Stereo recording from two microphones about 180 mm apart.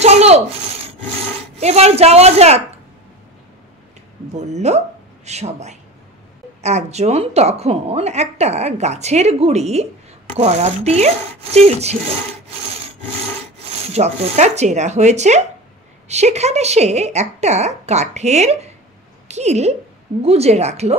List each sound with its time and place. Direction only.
0.0 s wood: 35° right (ahead or behind)
4.3 s a woman's voice: 40° right (ahead or behind)
12.4 s wood: 35° right (ahead or behind)
13.7 s a woman's voice: 35° right (ahead or behind)